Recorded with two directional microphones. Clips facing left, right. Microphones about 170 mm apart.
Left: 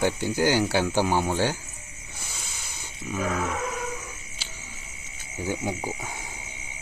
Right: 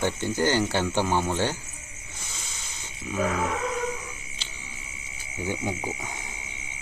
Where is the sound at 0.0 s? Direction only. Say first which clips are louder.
Left 2 dB; 10° left (ahead or behind).